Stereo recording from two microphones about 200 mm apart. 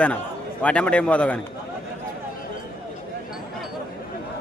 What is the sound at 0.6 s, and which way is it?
Speech, 5° left (ahead or behind).